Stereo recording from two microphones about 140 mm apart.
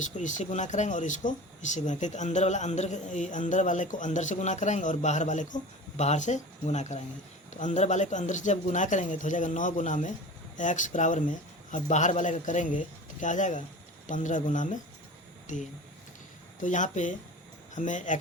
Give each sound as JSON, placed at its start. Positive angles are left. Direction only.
{"t": 0.0, "sound": "speech", "side_deg": 65}